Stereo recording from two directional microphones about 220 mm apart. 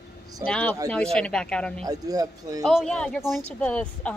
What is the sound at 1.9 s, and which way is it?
Speech, 15° right (ahead or behind).